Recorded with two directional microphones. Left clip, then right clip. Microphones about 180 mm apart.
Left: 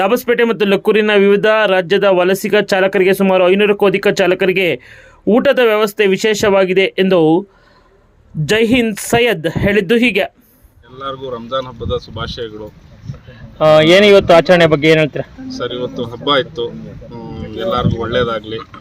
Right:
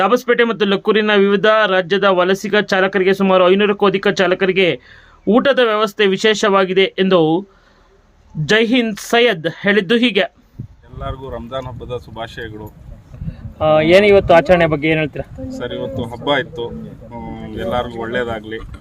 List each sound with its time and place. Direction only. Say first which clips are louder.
0.0 s speech: left 1 dB; 10° left (ahead or behind)
8.4 s speech: left 1 dB; 10° left (ahead or behind)
10.9 s speech: left 4 dB; centre (ahead or behind)
13.6 s speech: left 3 dB; 50° left (ahead or behind)
15.6 s speech: left 3 dB; 5° right (ahead or behind)